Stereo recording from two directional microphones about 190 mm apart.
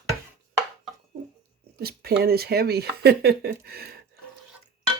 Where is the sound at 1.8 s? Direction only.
55° right (ahead or behind).